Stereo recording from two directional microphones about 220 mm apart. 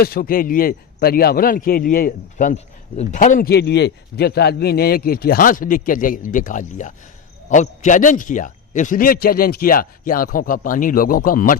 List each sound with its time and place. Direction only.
0.0 s a man's voice: 40° left (ahead or behind)